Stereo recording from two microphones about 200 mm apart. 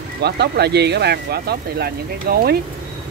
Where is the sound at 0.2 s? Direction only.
55° right (ahead or behind).